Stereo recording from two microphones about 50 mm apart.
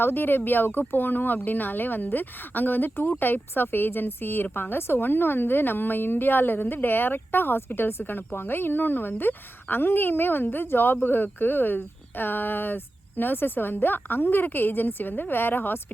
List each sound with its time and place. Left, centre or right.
0.0 s a woman's voice: left